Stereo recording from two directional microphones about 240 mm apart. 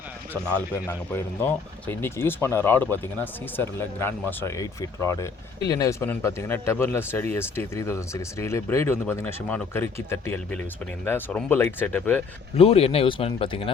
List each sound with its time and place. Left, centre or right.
0.5 s speech: centre
12.5 s speech: left